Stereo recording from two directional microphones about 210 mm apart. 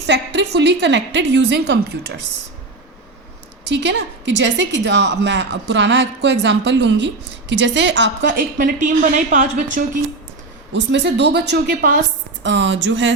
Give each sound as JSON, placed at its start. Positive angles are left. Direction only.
{"t": 0.0, "sound": "a woman's voice", "side_deg": -55}
{"t": 3.7, "sound": "a woman's voice", "side_deg": -55}
{"t": 8.5, "sound": "speech", "side_deg": -40}
{"t": 10.7, "sound": "a woman's voice", "side_deg": -55}
{"t": 12.4, "sound": "a woman's voice", "side_deg": -55}